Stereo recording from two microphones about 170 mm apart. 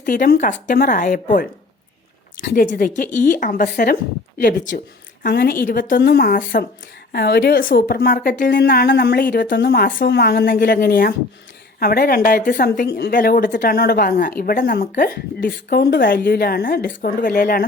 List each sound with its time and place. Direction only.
0.0 s speech: 55° left (ahead or behind)